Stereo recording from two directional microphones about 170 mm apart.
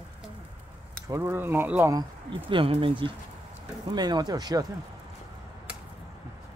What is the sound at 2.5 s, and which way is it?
Speech, 30° right (ahead or behind).